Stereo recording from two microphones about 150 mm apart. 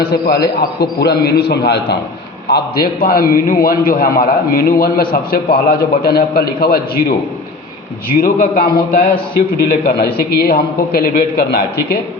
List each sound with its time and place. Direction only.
0.0 s a man's voice: 90° left
8.1 s a man's voice: 70° left (ahead or behind); by 11.9 s 90° left